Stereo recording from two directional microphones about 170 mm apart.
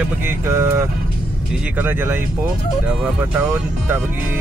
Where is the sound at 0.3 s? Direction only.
15° right (ahead or behind).